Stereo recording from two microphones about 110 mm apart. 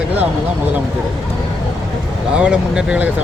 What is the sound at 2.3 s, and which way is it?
Speech, 5° right (ahead or behind).